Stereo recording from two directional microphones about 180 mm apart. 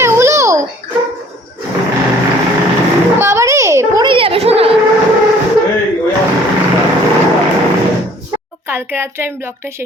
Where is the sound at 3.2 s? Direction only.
15° right (ahead or behind); by 4.7 s 35° right (ahead or behind).